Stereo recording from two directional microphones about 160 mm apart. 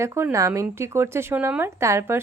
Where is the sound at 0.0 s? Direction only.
15° right (ahead or behind).